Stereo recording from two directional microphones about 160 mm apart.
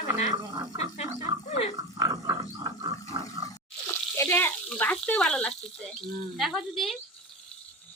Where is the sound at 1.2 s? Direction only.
45° left (ahead or behind).